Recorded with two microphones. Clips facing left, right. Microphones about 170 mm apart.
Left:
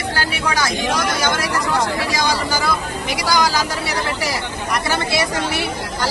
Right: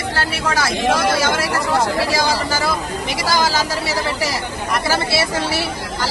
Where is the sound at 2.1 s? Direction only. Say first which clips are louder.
Right 1 dB; 5° right (ahead or behind).